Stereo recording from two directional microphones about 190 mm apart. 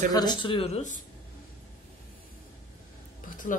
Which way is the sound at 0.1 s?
20° left (ahead or behind).